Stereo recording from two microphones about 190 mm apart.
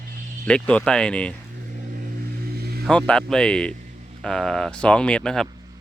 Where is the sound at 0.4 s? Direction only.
5° left (ahead or behind).